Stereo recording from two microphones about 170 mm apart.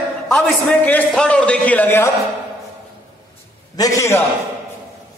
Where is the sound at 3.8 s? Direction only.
20° left (ahead or behind).